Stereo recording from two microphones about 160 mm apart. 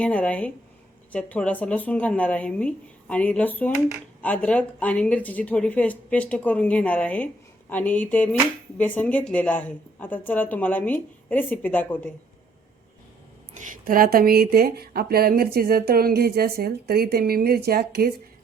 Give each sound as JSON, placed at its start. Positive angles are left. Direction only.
{"t": 0.0, "sound": "speech", "side_deg": 10}
{"t": 13.6, "sound": "a woman's voice", "side_deg": -60}